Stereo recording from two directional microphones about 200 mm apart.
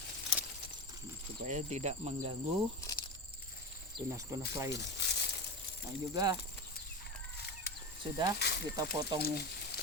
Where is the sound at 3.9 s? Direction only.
15° right (ahead or behind).